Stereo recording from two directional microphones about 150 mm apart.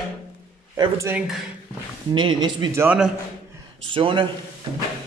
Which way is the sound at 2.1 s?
30° right (ahead or behind).